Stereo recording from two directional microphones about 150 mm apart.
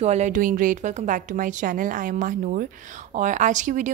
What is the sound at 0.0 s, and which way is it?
A woman's voice, 50° right (ahead or behind).